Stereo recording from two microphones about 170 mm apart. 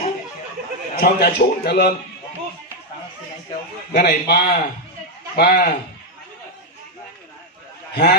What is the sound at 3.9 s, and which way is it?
A man's voice, 70° left (ahead or behind).